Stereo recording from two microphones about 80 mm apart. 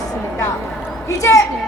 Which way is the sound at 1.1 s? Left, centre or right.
Left.